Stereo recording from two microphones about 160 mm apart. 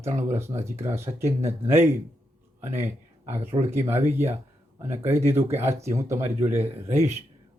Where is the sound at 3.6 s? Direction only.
15° right (ahead or behind).